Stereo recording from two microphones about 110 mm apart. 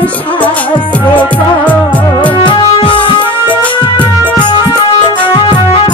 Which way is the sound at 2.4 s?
50° left (ahead or behind).